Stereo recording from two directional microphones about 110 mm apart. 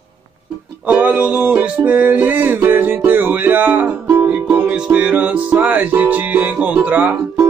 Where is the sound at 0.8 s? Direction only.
15° right (ahead or behind).